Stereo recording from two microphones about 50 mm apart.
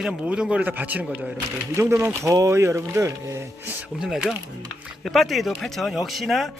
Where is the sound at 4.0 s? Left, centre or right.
Centre.